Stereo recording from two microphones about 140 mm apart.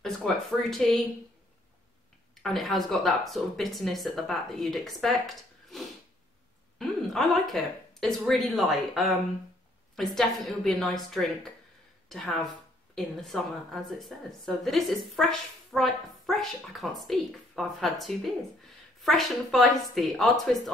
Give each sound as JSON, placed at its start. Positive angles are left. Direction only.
{"t": 0.0, "sound": "speech", "side_deg": 5}
{"t": 2.4, "sound": "a woman's voice", "side_deg": 0}
{"t": 6.8, "sound": "a woman's voice", "side_deg": 0}